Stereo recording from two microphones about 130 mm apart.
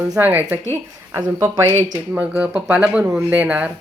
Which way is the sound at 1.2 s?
25° right (ahead or behind).